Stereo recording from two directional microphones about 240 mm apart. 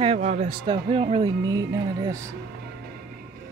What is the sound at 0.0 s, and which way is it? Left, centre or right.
Speech, right.